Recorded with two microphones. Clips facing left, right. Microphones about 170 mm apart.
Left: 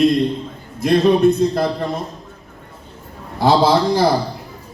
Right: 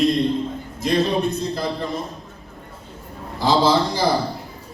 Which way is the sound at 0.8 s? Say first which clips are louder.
Left 7 dB; 55° left (ahead or behind).